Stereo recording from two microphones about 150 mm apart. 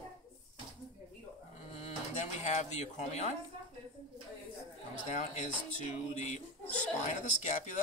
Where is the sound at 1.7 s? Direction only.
45° left (ahead or behind).